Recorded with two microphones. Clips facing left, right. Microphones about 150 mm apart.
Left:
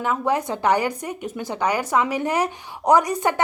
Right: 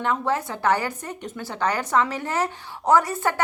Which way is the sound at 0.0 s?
5° left (ahead or behind).